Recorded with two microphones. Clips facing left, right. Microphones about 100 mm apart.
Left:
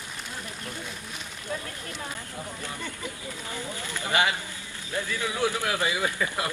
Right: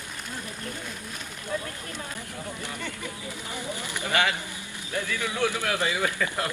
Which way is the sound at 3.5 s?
20° right (ahead or behind).